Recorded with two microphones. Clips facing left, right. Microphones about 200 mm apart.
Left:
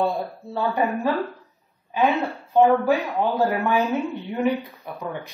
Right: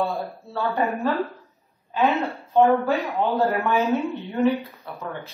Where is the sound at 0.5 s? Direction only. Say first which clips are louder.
Left 1 dB; 15° left (ahead or behind).